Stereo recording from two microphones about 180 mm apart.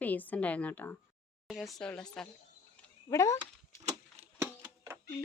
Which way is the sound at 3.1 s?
15° left (ahead or behind).